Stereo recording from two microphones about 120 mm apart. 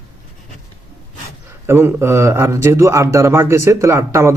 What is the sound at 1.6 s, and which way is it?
Speech, 20° right (ahead or behind).